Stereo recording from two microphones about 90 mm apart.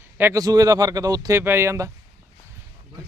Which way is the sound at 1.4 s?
30° right (ahead or behind).